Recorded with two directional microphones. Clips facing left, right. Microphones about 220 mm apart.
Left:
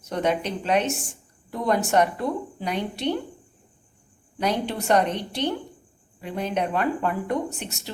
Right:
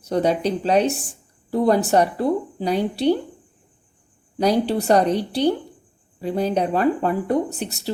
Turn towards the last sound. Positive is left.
turn(degrees=-35)  # may be behind; listen again after turning